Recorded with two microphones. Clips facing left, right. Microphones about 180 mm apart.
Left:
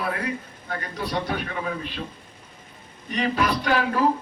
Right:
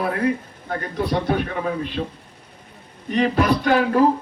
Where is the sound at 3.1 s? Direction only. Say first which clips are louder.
Right 5 dB; 45° right (ahead or behind).